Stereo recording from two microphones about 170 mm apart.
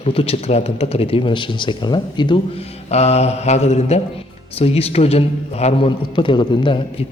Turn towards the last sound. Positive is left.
turn(degrees=30)  # may be behind; listen again after turning